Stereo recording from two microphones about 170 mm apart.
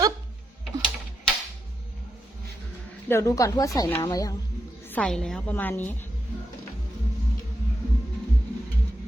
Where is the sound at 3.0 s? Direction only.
15° left (ahead or behind).